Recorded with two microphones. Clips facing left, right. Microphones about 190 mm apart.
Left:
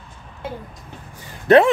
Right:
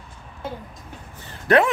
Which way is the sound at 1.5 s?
25° left (ahead or behind).